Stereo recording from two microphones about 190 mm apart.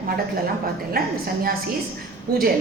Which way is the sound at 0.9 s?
50° right (ahead or behind).